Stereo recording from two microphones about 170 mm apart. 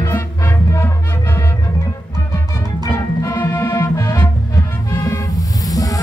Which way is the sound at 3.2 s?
15° left (ahead or behind).